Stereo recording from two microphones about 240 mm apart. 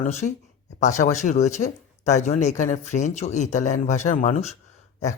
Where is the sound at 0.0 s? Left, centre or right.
Left.